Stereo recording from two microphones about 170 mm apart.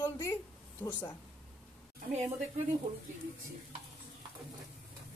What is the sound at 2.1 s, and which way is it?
Speech, 40° right (ahead or behind).